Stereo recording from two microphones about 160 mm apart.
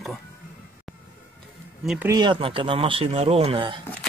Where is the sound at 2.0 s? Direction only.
25° right (ahead or behind).